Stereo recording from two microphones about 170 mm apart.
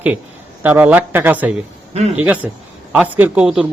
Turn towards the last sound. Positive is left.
turn(degrees=-5)  # may be behind; listen again after turning